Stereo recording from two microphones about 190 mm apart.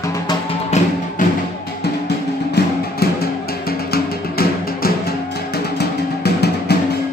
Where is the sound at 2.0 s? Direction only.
55° left (ahead or behind).